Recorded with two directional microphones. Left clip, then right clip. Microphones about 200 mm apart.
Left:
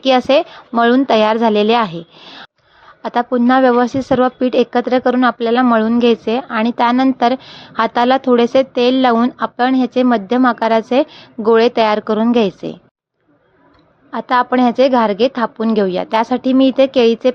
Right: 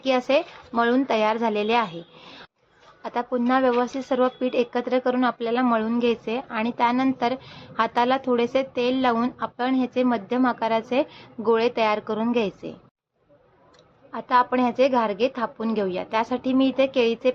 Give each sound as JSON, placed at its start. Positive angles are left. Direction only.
{"t": 0.0, "sound": "a woman's voice", "side_deg": 45}
{"t": 14.1, "sound": "a woman's voice", "side_deg": 45}